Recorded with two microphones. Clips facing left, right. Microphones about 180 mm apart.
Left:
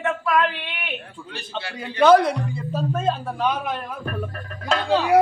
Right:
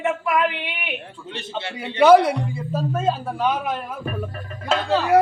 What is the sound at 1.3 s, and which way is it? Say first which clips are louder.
Speech: right 2 dB; 25° right (ahead or behind).